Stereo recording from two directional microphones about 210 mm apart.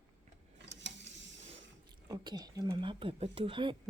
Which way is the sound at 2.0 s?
20° right (ahead or behind).